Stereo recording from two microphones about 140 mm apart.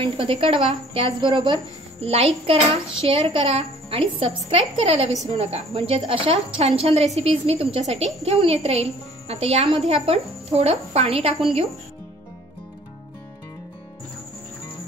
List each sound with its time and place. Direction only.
0.0 s a woman's voice: 40° right (ahead or behind)